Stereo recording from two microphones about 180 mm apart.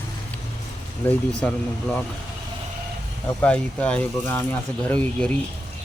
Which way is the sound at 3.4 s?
5° left (ahead or behind).